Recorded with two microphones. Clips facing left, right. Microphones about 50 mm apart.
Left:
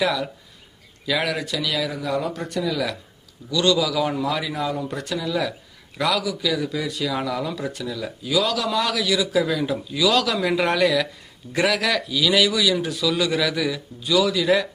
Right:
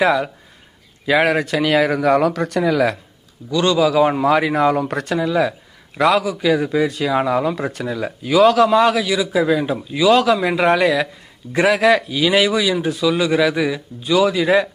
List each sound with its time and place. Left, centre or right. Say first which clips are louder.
0.0 s a man's voice: right 6 dB; right
2.6 s speech: right 8 dB; right
3.5 s a man's voice: right 5 dB; right
5.1 s a man's voice: right 7 dB; right